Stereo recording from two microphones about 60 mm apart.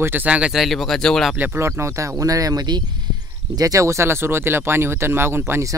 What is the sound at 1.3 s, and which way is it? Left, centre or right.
Speech, right.